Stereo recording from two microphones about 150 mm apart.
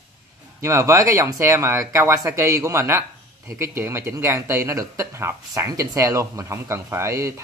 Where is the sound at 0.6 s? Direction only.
20° right (ahead or behind).